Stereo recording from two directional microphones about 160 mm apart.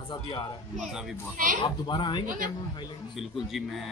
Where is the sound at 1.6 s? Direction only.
30° left (ahead or behind).